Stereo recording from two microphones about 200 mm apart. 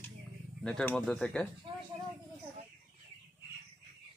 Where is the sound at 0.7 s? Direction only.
5° left (ahead or behind).